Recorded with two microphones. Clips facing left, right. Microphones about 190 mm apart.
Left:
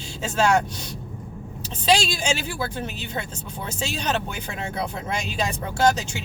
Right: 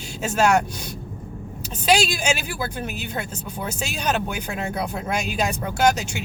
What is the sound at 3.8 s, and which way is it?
Speech, 10° right (ahead or behind).